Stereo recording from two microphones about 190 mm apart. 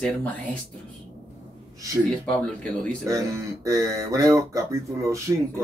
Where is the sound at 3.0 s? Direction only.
15° right (ahead or behind).